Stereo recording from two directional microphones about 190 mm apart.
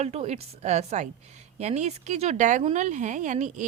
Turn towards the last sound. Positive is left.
turn(degrees=-40)  # may be behind; listen again after turning